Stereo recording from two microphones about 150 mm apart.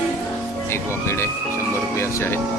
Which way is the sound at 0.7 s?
15° left (ahead or behind).